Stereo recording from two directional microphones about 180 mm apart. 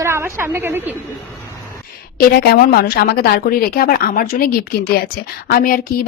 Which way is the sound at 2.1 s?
55° left (ahead or behind).